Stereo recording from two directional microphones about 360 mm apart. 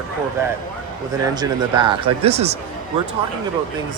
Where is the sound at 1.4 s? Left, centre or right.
Centre.